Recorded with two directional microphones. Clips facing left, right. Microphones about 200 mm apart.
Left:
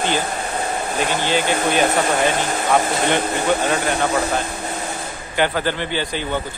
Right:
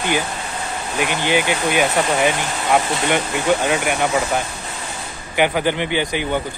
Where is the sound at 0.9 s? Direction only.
15° right (ahead or behind).